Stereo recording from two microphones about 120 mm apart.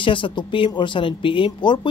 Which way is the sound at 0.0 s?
45° left (ahead or behind).